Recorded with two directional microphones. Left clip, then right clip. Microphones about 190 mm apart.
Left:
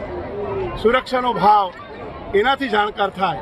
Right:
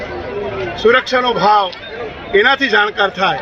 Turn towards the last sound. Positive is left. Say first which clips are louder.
# right 5 dB
turn(degrees=0)  # may be behind; listen again after turning